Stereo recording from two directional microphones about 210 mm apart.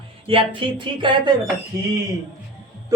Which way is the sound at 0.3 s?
25° right (ahead or behind).